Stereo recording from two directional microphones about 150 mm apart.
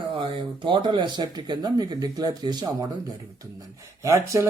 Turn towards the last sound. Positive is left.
turn(degrees=-20)  # may be behind; listen again after turning